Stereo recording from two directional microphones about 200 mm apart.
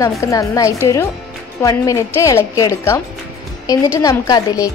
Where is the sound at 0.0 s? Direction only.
15° left (ahead or behind).